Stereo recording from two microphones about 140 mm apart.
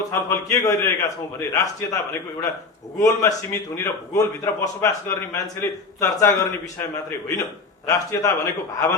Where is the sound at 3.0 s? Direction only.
25° left (ahead or behind).